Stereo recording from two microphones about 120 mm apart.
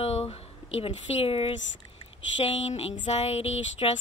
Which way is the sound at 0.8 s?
50° left (ahead or behind).